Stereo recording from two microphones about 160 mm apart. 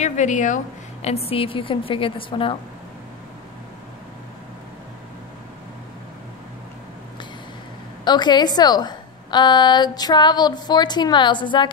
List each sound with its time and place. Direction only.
0.0 s a woman's voice: 50° left (ahead or behind)
1.0 s a woman's voice: 40° left (ahead or behind)
8.0 s a woman's voice: 25° left (ahead or behind)